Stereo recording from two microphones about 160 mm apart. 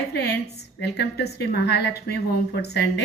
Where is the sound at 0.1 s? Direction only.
90° left.